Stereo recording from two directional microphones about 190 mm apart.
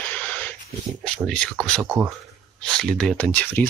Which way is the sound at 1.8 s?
15° right (ahead or behind).